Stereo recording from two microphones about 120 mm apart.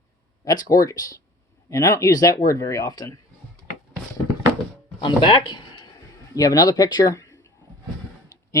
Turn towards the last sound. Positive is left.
turn(degrees=25)  # may be behind; listen again after turning